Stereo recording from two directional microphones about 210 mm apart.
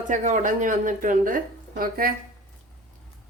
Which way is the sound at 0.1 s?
35° right (ahead or behind).